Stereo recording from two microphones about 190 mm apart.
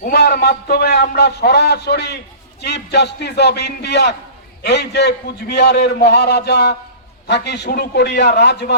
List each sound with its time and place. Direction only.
0.0 s a man's voice: 55° left (ahead or behind)